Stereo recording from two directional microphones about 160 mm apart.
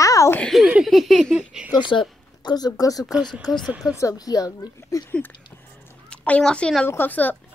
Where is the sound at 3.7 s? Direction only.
5° right (ahead or behind).